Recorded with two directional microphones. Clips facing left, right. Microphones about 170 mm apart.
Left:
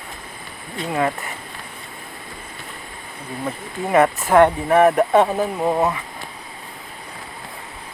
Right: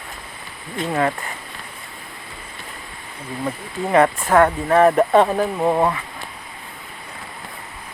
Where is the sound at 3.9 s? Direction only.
20° left (ahead or behind).